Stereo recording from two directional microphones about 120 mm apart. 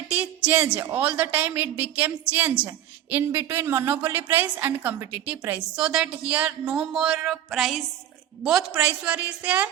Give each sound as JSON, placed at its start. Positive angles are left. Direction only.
{"t": 0.1, "sound": "a woman's voice", "side_deg": -10}
{"t": 8.8, "sound": "a woman's voice", "side_deg": -10}